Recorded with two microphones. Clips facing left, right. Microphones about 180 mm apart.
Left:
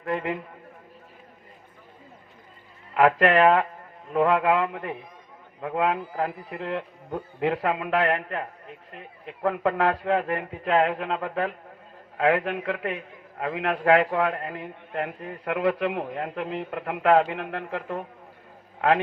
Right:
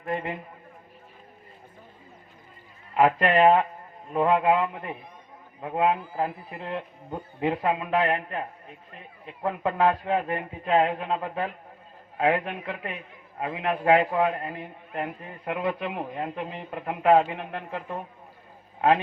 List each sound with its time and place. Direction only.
2.9 s a man's voice: 75° left (ahead or behind)
4.1 s a man's voice: 60° left (ahead or behind)